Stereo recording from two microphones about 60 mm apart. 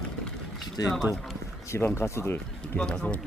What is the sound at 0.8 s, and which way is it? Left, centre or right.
Speech, left.